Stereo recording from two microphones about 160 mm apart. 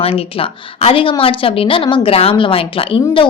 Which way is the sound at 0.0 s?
35° left (ahead or behind).